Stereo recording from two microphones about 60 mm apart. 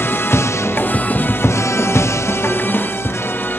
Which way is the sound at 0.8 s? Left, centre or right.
Left.